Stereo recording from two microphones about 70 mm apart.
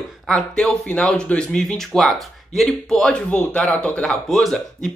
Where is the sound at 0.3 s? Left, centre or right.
Centre.